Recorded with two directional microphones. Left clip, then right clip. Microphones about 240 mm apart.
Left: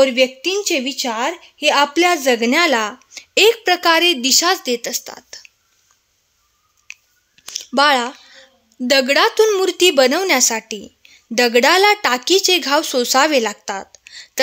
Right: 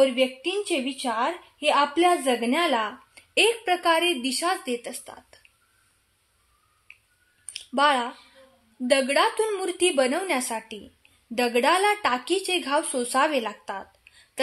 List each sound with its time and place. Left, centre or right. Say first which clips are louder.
0.0 s a woman's voice: left 7 dB; left
6.9 s a sound: left 13 dB; left
8.8 s a woman's voice: left 7 dB; left